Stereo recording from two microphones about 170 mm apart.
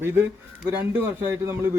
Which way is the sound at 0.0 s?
15° right (ahead or behind).